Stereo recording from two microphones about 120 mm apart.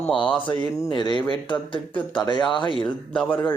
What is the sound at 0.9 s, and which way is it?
Speech, 40° left (ahead or behind).